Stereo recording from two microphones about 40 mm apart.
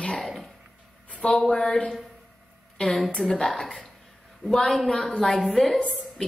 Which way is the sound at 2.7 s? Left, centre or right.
Left.